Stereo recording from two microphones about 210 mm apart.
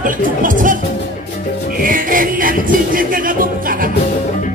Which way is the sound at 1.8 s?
40° right (ahead or behind).